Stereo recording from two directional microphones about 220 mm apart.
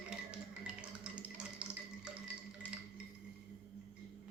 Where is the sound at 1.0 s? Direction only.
5° right (ahead or behind).